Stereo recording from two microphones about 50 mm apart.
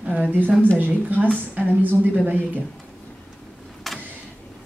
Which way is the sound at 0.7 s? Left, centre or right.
Right.